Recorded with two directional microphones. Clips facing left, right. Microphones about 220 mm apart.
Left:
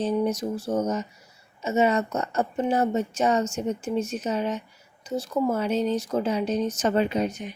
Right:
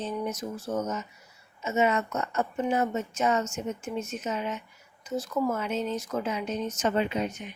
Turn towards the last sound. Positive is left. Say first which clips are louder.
# left 4 dB
turn(degrees=40)  # may be behind; listen again after turning